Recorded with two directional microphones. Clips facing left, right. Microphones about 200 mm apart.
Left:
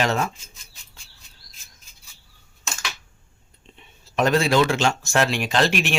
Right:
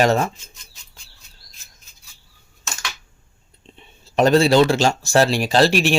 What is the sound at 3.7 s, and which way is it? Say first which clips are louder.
Speech: right 5 dB; 30° right (ahead or behind).